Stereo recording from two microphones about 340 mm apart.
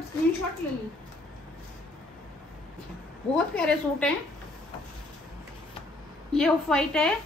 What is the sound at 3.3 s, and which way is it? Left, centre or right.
Speech, centre.